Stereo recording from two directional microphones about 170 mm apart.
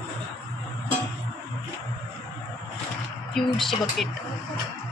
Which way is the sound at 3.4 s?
Centre (ahead or behind).